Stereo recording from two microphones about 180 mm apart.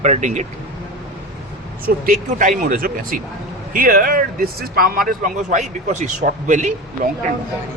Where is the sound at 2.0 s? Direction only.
45° right (ahead or behind).